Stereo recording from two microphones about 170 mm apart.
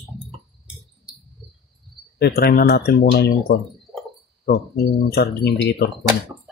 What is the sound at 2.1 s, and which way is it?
Speech, 70° left (ahead or behind).